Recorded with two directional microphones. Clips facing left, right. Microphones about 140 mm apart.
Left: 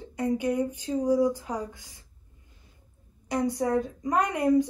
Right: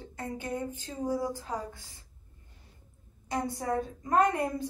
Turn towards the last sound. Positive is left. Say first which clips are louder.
# left 3 dB
turn(degrees=15)  # may be behind; listen again after turning